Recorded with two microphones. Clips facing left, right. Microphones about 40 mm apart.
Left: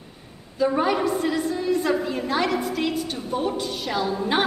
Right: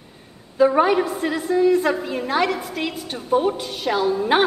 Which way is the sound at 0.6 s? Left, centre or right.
Centre.